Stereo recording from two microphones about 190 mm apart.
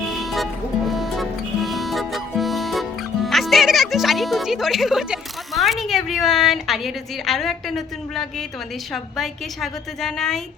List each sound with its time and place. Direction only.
0.2 s music: centre (ahead or behind)
3.2 s a woman's voice: centre (ahead or behind)